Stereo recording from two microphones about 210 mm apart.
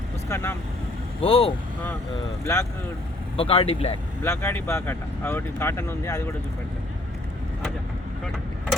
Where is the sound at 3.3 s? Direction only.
25° left (ahead or behind).